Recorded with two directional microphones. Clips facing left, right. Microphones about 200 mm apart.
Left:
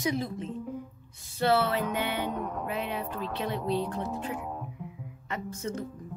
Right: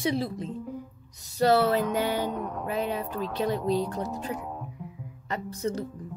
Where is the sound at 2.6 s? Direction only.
40° right (ahead or behind).